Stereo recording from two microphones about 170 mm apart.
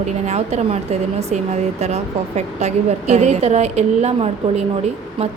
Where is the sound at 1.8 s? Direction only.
40° right (ahead or behind).